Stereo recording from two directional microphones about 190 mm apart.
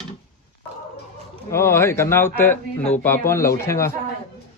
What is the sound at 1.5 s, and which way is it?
Speech, 15° left (ahead or behind).